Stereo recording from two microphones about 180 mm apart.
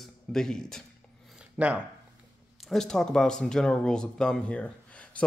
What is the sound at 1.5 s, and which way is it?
Speech, 5° right (ahead or behind).